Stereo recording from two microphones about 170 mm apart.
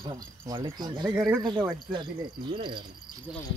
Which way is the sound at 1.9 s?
25° right (ahead or behind).